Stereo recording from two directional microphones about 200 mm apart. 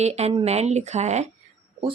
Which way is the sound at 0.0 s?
30° right (ahead or behind).